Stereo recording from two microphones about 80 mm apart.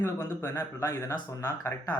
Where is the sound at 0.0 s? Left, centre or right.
Left.